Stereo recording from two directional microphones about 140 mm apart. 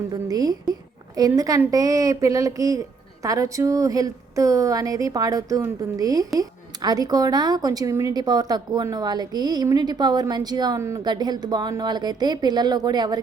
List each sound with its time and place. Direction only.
0.1 s a woman's voice: 25° right (ahead or behind)